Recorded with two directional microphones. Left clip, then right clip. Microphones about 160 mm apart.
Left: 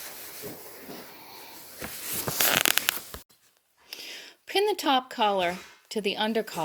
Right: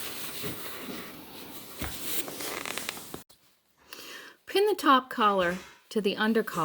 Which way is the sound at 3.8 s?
70° left (ahead or behind).